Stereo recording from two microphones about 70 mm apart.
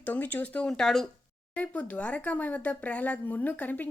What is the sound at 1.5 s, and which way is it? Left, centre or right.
Speech, left.